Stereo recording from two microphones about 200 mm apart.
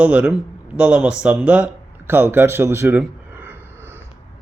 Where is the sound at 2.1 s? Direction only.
10° right (ahead or behind).